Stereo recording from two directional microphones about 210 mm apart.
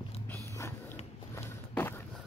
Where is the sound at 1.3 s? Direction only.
10° left (ahead or behind).